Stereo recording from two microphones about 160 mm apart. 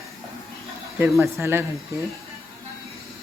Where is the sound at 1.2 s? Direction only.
15° right (ahead or behind).